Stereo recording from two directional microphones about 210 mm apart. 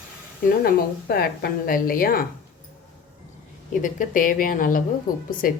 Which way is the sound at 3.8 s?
40° left (ahead or behind).